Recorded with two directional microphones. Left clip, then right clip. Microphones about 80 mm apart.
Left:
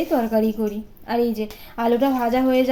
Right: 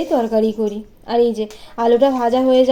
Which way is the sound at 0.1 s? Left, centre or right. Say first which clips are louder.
Right 6 dB; right.